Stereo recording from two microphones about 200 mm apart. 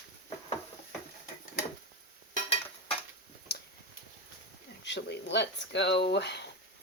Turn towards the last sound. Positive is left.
turn(degrees=60)  # may be behind; listen again after turning